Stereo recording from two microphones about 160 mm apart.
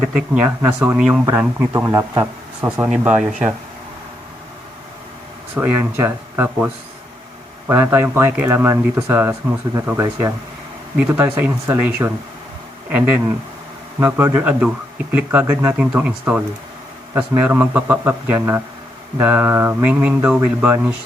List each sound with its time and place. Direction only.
0.0 s speech: 10° right (ahead or behind)
5.5 s speech: 10° right (ahead or behind)
7.7 s speech: 15° right (ahead or behind)
14.0 s speech: 10° right (ahead or behind)